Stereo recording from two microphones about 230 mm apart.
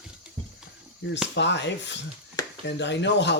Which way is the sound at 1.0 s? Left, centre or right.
Left.